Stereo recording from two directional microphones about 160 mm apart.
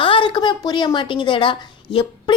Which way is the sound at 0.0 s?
30° left (ahead or behind).